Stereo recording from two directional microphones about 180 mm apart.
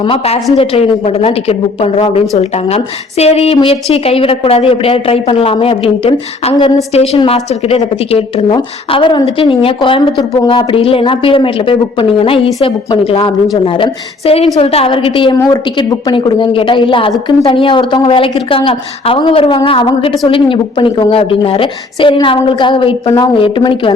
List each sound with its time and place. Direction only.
0.0 s a woman's voice: 30° left (ahead or behind)